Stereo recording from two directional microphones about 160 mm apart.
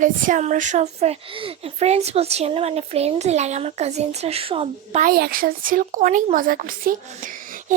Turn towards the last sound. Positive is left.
turn(degrees=-60)  # may be behind; listen again after turning